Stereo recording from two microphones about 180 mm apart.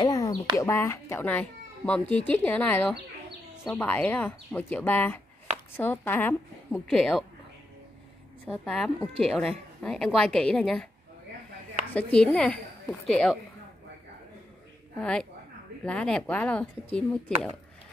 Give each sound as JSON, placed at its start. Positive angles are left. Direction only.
{"t": 0.0, "sound": "a sound", "side_deg": 20}
{"t": 0.6, "sound": "a child's voice", "side_deg": 15}
{"t": 8.5, "sound": "a woman's voice", "side_deg": 5}
{"t": 11.9, "sound": "a woman's voice", "side_deg": 5}
{"t": 15.0, "sound": "a woman's voice", "side_deg": 5}